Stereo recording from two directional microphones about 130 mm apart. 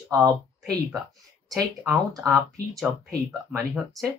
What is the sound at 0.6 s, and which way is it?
Speech, centre (ahead or behind).